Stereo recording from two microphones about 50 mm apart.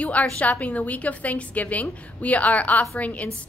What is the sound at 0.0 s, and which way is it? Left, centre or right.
A woman's voice, left.